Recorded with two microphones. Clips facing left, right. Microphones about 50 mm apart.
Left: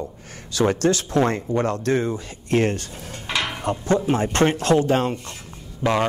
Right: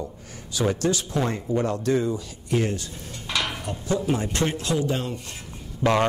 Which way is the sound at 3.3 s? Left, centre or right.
Left.